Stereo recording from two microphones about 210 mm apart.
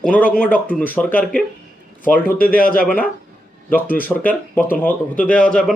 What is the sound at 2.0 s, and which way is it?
Speech, 40° left (ahead or behind).